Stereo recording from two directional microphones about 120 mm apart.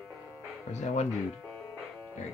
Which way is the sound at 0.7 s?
75° left (ahead or behind).